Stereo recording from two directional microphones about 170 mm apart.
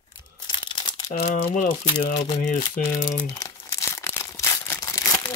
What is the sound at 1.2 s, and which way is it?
Speech, 45° left (ahead or behind).